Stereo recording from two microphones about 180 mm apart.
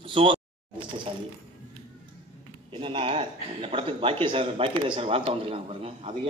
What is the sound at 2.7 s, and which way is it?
Speech, 30° right (ahead or behind).